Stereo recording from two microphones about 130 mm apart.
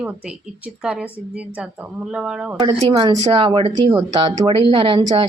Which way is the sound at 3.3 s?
45° right (ahead or behind).